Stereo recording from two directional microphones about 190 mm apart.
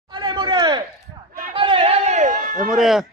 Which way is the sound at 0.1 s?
25° right (ahead or behind).